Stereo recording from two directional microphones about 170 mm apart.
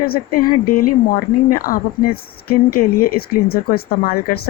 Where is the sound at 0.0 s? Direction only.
60° left (ahead or behind).